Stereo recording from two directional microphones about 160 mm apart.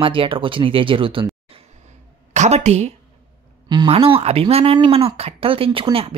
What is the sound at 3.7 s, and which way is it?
Speech, 30° right (ahead or behind).